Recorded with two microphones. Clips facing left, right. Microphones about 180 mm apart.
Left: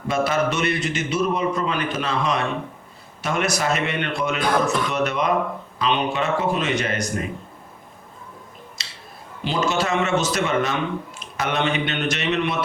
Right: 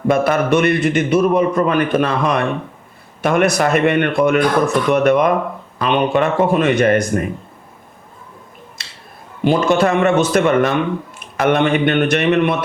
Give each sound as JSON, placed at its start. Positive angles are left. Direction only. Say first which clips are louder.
{"t": 0.1, "sound": "a man's voice", "louder": "right 7 dB", "side_deg": -55}
{"t": 8.8, "sound": "scissors", "louder": "right 1 dB", "side_deg": -55}
{"t": 9.4, "sound": "a man's voice", "louder": "right 9 dB", "side_deg": -55}